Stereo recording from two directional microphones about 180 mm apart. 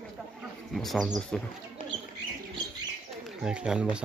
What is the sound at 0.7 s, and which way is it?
Speech, centre (ahead or behind).